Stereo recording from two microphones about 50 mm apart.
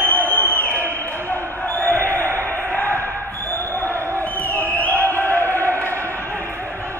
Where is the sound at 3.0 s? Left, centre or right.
Left.